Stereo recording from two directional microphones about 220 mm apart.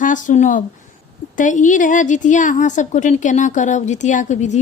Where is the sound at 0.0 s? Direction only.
35° left (ahead or behind).